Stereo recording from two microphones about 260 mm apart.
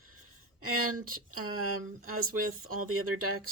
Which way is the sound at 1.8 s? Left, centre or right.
Right.